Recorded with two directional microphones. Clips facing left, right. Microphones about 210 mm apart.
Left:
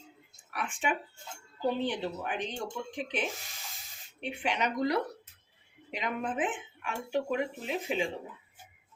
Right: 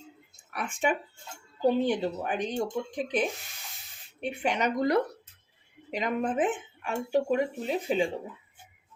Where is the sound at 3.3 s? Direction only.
Centre (ahead or behind).